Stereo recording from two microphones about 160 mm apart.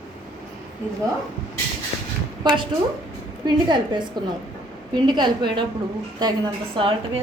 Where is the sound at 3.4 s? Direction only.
30° right (ahead or behind).